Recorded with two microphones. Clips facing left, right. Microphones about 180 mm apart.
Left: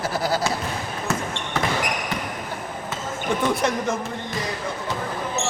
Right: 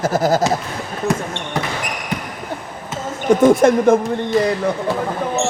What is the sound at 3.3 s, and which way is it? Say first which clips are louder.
Speech: right 12 dB; 45° right (ahead or behind).